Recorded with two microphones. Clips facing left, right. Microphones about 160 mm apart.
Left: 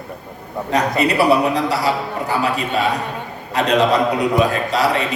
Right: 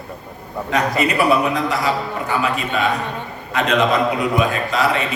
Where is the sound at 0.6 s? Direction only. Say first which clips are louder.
Left 1 dB; 35° left (ahead or behind).